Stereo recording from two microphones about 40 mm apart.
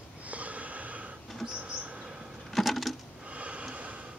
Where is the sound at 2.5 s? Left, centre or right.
Centre.